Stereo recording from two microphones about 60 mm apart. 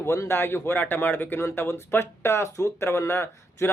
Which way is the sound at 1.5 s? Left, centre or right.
Left.